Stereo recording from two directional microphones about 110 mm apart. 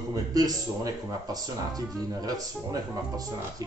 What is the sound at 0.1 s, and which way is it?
Speech, 35° right (ahead or behind).